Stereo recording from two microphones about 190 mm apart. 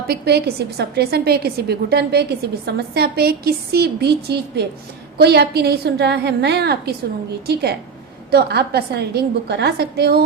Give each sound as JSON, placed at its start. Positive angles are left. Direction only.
{"t": 0.1, "sound": "a woman's voice", "side_deg": -55}